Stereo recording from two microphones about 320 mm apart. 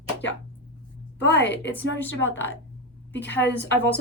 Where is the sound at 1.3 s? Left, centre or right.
Left.